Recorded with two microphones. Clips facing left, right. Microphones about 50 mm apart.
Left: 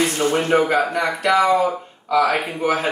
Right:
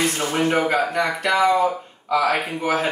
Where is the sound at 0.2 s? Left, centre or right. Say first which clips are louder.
Left 5 dB; centre.